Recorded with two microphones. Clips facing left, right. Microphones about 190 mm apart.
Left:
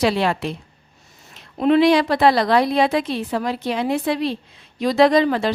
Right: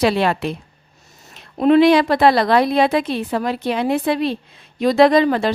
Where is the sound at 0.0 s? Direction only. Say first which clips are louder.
Right 2 dB; 55° right (ahead or behind).